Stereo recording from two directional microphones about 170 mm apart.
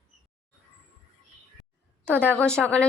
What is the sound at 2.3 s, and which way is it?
Speech, 5° left (ahead or behind).